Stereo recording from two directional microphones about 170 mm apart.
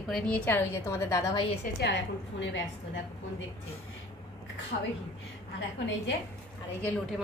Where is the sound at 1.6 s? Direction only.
70° left (ahead or behind).